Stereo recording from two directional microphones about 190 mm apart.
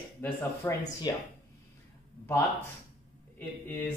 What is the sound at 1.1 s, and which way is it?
Speech, 25° left (ahead or behind).